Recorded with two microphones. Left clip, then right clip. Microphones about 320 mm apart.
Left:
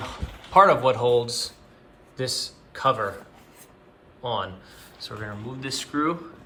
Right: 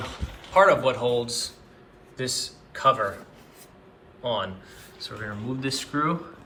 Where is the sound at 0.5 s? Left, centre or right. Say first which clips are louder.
Left 2 dB; centre.